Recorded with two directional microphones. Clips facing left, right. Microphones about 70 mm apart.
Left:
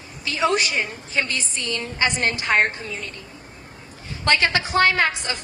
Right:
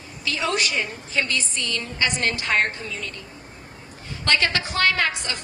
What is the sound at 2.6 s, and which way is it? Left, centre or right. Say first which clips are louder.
Speech: left 2 dB; left.